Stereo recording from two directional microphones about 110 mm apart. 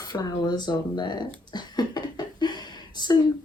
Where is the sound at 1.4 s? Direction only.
40° left (ahead or behind).